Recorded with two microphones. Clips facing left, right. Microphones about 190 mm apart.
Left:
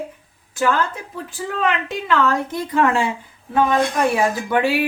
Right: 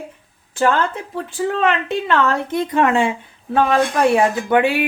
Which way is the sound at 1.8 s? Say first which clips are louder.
Right 2 dB; 25° right (ahead or behind).